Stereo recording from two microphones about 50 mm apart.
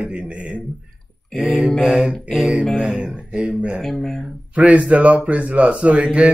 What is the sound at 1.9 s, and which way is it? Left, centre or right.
Mantra, centre.